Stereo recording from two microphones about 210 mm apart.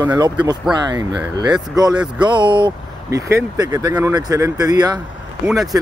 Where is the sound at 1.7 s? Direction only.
20° right (ahead or behind).